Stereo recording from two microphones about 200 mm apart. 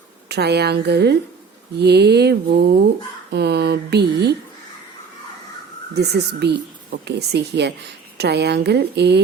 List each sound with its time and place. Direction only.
0.3 s a woman's voice: 55° right (ahead or behind)
6.0 s a woman's voice: 55° right (ahead or behind)